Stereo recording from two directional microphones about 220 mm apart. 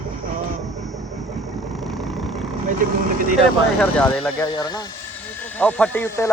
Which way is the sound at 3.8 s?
5° left (ahead or behind).